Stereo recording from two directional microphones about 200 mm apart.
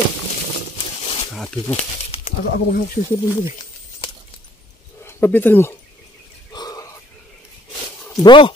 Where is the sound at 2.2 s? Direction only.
50° left (ahead or behind).